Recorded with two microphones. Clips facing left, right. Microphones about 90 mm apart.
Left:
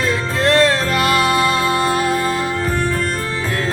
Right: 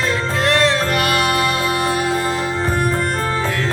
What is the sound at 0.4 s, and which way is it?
Music, 30° left (ahead or behind).